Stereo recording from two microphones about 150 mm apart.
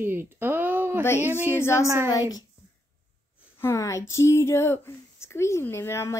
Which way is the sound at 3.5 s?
20° left (ahead or behind).